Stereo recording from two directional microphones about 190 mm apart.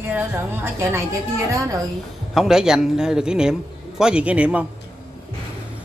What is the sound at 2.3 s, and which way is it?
A man's voice, centre (ahead or behind).